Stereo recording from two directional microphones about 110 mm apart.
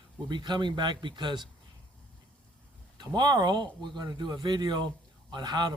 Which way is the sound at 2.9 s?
40° right (ahead or behind).